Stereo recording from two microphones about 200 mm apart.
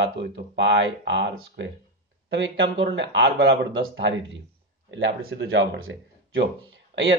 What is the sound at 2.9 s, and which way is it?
Speech, 60° right (ahead or behind).